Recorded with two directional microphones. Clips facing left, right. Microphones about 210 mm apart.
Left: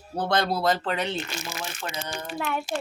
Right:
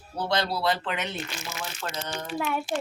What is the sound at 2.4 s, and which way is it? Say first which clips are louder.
Speech: even; 5° right (ahead or behind).